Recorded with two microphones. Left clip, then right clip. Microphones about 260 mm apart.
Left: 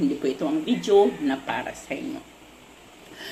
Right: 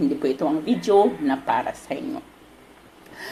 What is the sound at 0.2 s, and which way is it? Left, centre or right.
Speech, right.